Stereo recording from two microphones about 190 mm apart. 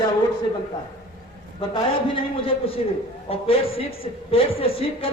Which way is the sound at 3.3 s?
30° left (ahead or behind).